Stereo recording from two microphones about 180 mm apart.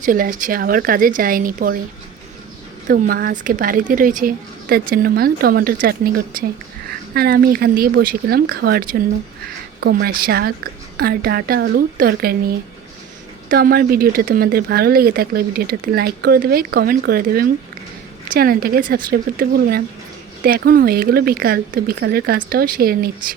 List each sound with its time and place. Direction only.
0.0 s a woman's voice: 50° right (ahead or behind)
2.8 s a woman's voice: 55° right (ahead or behind)